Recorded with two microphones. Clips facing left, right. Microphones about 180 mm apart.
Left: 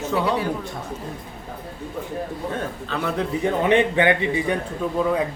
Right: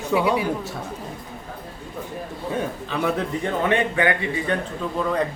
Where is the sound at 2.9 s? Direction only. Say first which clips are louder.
Right 1 dB; 5° right (ahead or behind).